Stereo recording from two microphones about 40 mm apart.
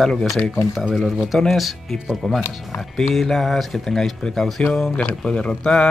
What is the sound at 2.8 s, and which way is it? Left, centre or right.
Speech, centre.